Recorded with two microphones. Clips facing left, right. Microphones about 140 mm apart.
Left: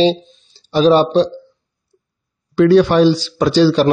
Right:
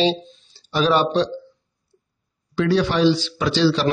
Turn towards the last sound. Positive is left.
turn(degrees=45)  # may be behind; listen again after turning